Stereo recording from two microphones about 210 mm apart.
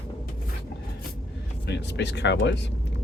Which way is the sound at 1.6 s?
55° left (ahead or behind).